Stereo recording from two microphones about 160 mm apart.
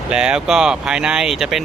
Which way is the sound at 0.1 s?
5° right (ahead or behind).